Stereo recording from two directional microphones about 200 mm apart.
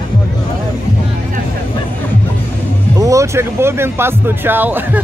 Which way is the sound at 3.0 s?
15° right (ahead or behind).